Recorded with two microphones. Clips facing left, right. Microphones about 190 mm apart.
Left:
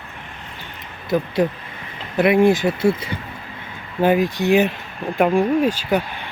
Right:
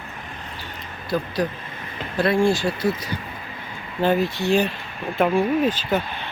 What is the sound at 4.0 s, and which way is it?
Speech, 15° left (ahead or behind).